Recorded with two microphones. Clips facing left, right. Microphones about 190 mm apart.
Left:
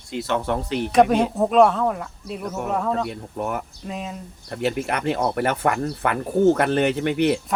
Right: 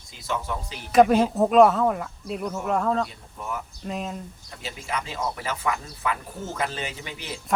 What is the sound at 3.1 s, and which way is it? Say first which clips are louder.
Speech: left 7 dB; 65° left (ahead or behind).